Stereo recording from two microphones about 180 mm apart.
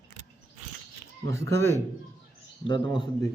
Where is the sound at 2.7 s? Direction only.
25° left (ahead or behind).